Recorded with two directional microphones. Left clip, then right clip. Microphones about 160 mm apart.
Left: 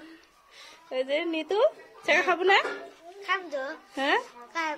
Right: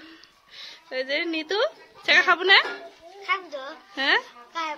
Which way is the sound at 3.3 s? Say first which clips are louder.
Right 1 dB; 25° left (ahead or behind).